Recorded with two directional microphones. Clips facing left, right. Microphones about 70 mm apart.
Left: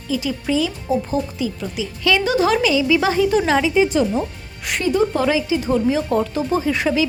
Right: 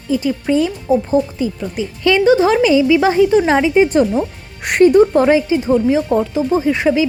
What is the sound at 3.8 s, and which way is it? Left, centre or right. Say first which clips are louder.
Speech: right 4 dB; right.